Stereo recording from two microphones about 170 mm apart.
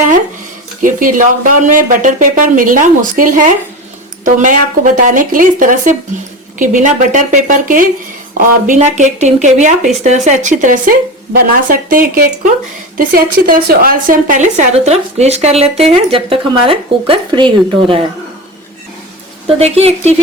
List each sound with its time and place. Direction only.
0.8 s a woman's voice: 50° right (ahead or behind); by 18.0 s 30° right (ahead or behind)
19.5 s a woman's voice: 35° right (ahead or behind)